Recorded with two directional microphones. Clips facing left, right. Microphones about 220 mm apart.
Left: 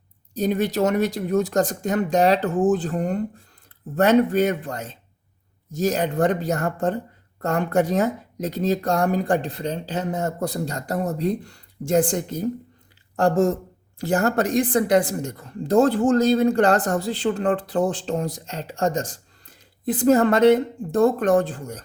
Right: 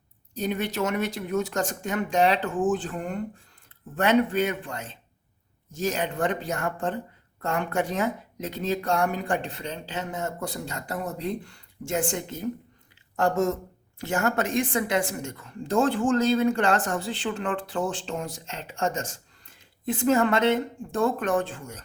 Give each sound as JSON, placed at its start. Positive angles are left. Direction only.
{"t": 0.3, "sound": "a woman's voice", "side_deg": 40}